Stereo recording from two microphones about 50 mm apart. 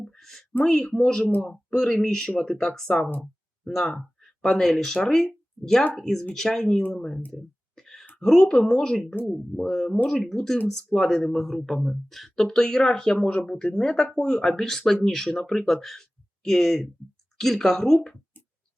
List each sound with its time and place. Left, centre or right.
0.2 s a sound: centre
0.6 s speech: centre
3.6 s a sound: centre
4.5 s speech: centre
7.3 s a sound: centre
8.2 s speech: centre
9.0 s speech: left
9.6 s speech: centre
14.3 s speech: centre